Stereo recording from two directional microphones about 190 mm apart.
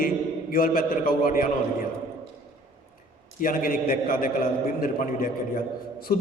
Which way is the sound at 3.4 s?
45° left (ahead or behind).